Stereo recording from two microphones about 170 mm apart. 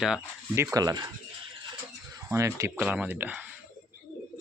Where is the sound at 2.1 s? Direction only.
15° right (ahead or behind).